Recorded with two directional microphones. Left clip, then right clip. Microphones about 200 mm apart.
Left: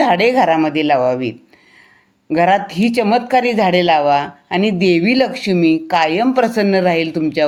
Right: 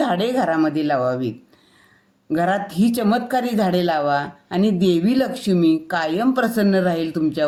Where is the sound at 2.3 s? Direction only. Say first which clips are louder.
Left 7 dB; 55° left (ahead or behind).